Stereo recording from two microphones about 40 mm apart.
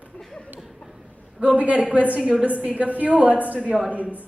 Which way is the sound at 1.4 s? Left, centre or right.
Right.